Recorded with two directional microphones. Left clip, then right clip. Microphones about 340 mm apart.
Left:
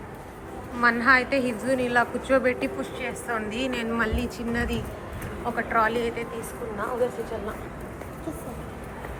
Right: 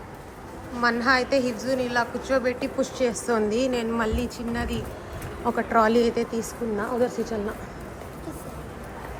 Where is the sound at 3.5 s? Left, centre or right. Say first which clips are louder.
Right 3 dB; centre.